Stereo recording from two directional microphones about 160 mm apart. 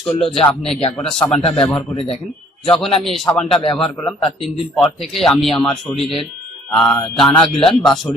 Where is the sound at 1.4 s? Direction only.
35° left (ahead or behind).